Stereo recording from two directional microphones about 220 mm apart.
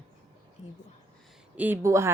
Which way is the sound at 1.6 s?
10° right (ahead or behind).